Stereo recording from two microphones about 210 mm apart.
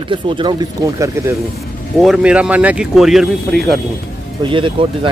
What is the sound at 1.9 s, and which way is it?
Speech, centre (ahead or behind).